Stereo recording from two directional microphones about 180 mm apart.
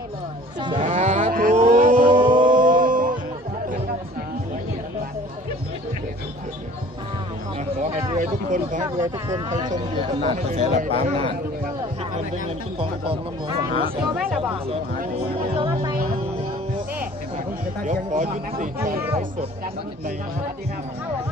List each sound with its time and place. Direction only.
0.6 s cattle: 25° right (ahead or behind)
0.8 s music: 40° right (ahead or behind)
1.6 s a sound: 45° right (ahead or behind)
2.3 s music: 45° right (ahead or behind)
8.2 s a sound: 45° right (ahead or behind)
8.8 s speech: 20° right (ahead or behind)
9.8 s speech: 30° right (ahead or behind)
12.4 s speech: 30° right (ahead or behind)
15.5 s speech: 30° right (ahead or behind)
17.8 s speech: 45° right (ahead or behind)